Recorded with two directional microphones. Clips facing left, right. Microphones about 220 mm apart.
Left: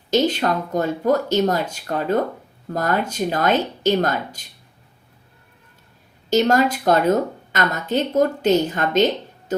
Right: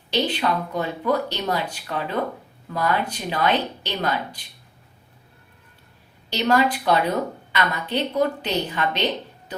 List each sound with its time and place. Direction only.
0.1 s a woman's voice: 45° left (ahead or behind)
6.3 s a woman's voice: 45° left (ahead or behind)